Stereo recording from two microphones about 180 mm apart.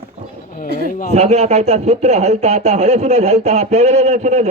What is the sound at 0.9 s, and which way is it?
Speech, 50° left (ahead or behind).